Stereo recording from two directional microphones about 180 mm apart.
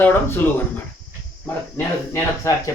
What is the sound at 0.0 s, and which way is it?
Speech, 10° left (ahead or behind).